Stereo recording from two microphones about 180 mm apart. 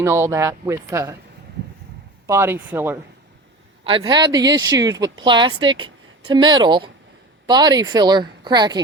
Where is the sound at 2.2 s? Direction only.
15° right (ahead or behind).